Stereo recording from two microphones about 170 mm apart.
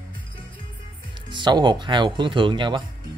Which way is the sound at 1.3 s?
25° right (ahead or behind).